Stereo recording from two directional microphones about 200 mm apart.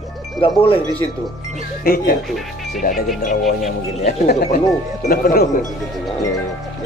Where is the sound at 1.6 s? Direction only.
45° left (ahead or behind).